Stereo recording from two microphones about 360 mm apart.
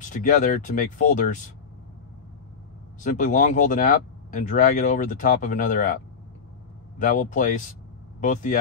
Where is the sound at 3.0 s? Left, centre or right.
Left.